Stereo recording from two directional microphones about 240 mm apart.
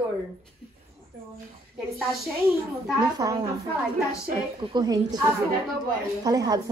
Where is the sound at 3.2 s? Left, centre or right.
Centre.